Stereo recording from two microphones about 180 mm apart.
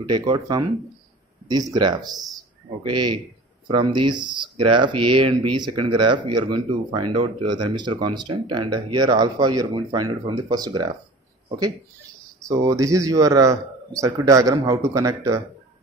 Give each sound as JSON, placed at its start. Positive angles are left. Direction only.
{"t": 0.0, "sound": "speech", "side_deg": -20}
{"t": 12.4, "sound": "speech", "side_deg": -20}